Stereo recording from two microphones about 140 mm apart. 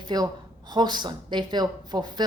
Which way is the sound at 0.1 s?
30° right (ahead or behind).